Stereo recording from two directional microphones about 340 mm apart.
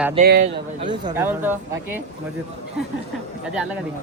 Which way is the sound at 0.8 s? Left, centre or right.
Centre.